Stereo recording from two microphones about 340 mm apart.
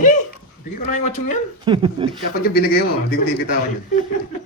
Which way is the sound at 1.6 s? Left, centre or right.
Centre.